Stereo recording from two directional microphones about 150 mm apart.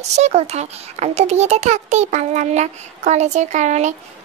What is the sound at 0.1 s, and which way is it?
A child's voice, 50° right (ahead or behind).